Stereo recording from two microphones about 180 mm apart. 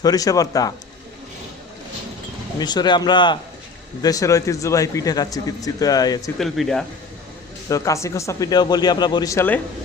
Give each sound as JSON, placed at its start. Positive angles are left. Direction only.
{"t": 0.0, "sound": "speech", "side_deg": 20}
{"t": 2.6, "sound": "speech", "side_deg": 25}
{"t": 6.4, "sound": "speech", "side_deg": 0}
{"t": 7.7, "sound": "speech", "side_deg": 15}